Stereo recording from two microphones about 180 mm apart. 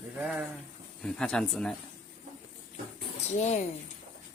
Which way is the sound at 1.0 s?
5° left (ahead or behind).